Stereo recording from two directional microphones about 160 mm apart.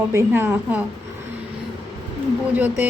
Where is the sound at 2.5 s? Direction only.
10° right (ahead or behind).